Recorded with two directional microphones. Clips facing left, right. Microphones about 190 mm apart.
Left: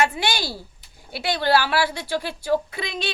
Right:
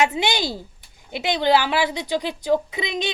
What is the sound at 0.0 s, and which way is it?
A woman's voice, 20° right (ahead or behind).